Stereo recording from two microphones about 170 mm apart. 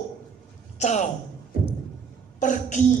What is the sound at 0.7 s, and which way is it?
Speech, 45° left (ahead or behind).